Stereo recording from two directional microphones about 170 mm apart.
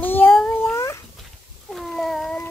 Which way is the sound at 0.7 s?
15° left (ahead or behind).